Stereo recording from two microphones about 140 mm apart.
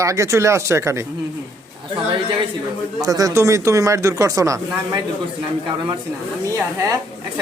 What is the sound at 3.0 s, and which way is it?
Speech, 25° right (ahead or behind).